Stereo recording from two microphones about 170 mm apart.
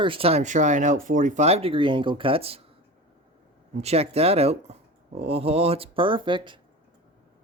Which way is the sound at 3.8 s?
35° right (ahead or behind).